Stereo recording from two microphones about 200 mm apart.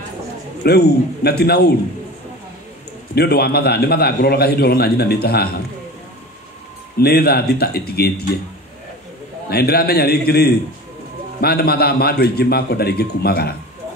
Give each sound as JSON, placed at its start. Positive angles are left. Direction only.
{"t": 0.7, "sound": "a man's voice", "side_deg": 55}
{"t": 3.2, "sound": "a man's voice", "side_deg": 50}
{"t": 7.0, "sound": "a man's voice", "side_deg": 50}
{"t": 9.5, "sound": "a man's voice", "side_deg": 50}